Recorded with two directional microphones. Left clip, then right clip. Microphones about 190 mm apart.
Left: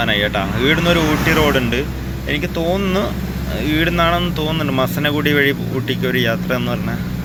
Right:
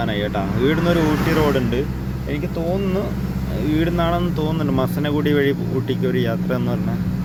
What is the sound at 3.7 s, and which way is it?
Speech, 10° right (ahead or behind).